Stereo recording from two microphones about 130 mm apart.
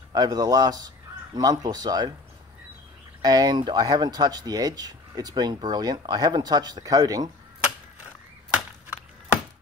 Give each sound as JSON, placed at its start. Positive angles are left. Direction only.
{"t": 0.1, "sound": "speech", "side_deg": -30}
{"t": 3.2, "sound": "speech", "side_deg": -30}